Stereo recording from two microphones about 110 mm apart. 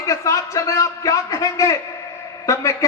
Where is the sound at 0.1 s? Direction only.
30° left (ahead or behind).